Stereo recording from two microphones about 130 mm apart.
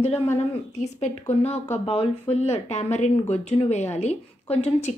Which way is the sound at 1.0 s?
60° left (ahead or behind).